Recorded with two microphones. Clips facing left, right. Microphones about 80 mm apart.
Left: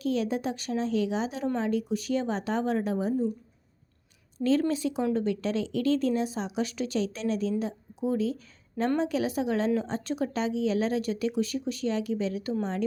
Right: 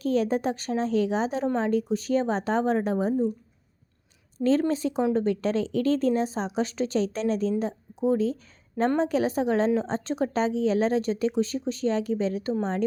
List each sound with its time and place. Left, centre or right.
0.0 s a woman's voice: right
4.4 s a woman's voice: right